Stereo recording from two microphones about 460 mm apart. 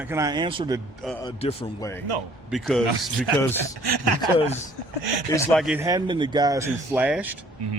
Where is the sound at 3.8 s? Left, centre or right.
Right.